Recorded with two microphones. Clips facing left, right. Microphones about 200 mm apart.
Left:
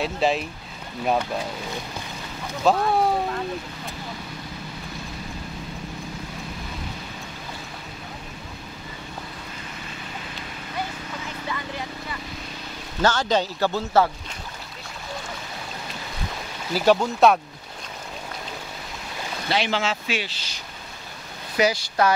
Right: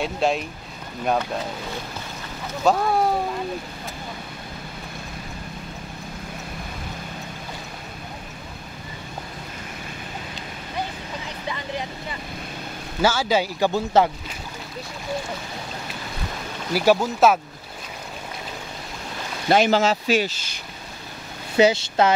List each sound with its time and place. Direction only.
0.0 s speech: centre (ahead or behind)
2.6 s speech: centre (ahead or behind)
11.2 s vehicle: 20° right (ahead or behind)
13.0 s speech: 5° right (ahead or behind)
16.7 s speech: 10° right (ahead or behind)
19.5 s speech: 45° right (ahead or behind)
21.5 s speech: 25° right (ahead or behind)